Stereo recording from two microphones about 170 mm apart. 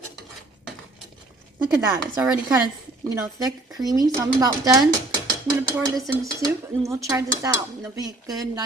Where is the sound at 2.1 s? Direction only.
10° right (ahead or behind).